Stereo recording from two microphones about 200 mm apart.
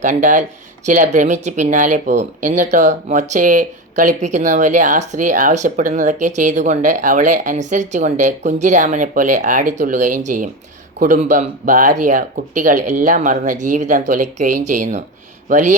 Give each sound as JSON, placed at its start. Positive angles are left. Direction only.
{"t": 0.0, "sound": "speech", "side_deg": -40}